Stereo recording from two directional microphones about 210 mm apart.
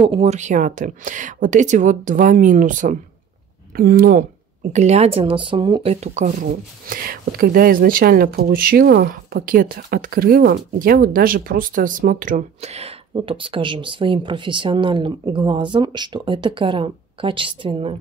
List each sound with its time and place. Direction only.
0.0 s speech: 30° right (ahead or behind)
4.7 s speech: 30° right (ahead or behind)